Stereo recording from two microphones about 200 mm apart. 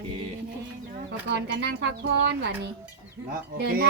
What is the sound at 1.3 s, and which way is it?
Speech, 60° right (ahead or behind).